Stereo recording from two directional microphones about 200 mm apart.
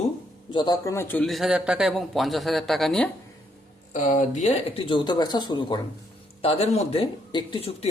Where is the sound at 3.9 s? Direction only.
40° left (ahead or behind).